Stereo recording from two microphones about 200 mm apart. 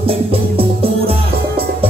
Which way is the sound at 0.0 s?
30° right (ahead or behind).